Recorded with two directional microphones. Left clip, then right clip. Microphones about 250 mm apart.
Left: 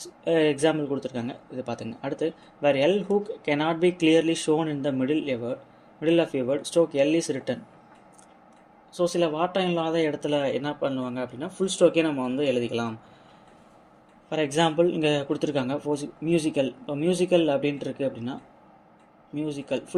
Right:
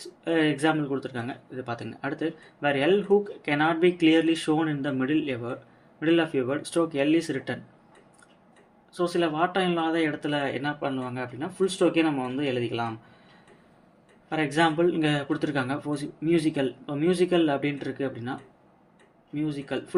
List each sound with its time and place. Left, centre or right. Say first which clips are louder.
0.3 s speech: left 2 dB; left
9.0 s speech: left 1 dB; left
14.3 s speech: even; left